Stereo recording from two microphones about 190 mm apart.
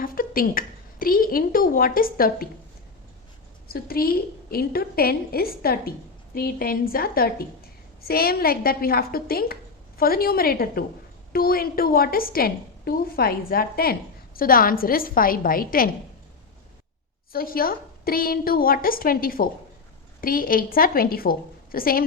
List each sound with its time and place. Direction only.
0.0 s a woman's voice: 50° left (ahead or behind)
3.7 s a woman's voice: 50° left (ahead or behind)
17.3 s a woman's voice: 50° left (ahead or behind)